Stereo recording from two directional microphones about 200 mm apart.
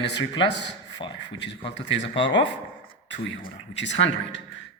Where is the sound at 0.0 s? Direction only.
60° left (ahead or behind).